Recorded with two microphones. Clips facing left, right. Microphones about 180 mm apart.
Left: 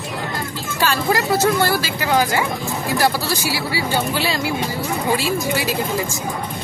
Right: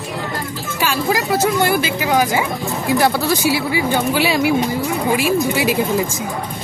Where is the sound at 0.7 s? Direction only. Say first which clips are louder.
Even; 15° right (ahead or behind).